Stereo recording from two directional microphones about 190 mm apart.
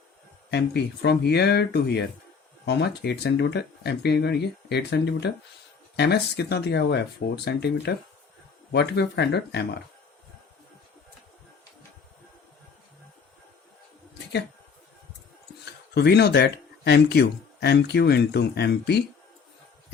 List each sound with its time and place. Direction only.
0.5 s speech: 60° left (ahead or behind)
16.0 s speech: 60° left (ahead or behind)